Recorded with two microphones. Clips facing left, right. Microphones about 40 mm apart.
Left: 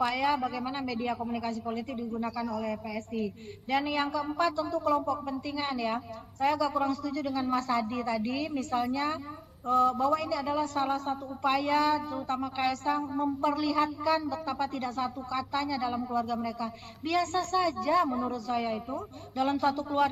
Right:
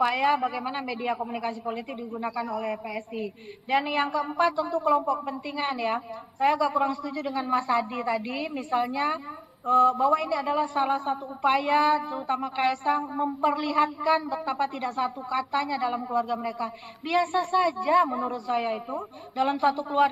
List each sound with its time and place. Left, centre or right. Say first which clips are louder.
0.0 s a man's voice: right 4 dB; centre